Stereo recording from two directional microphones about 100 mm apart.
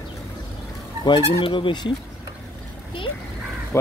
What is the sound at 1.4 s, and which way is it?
Speech, 55° left (ahead or behind).